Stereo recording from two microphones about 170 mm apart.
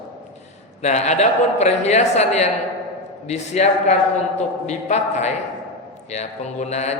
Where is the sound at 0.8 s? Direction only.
40° left (ahead or behind).